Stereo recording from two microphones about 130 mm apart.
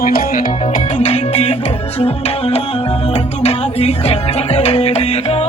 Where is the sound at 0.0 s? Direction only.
90° left.